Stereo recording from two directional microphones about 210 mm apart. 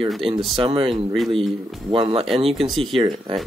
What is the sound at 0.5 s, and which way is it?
Speech, 25° right (ahead or behind).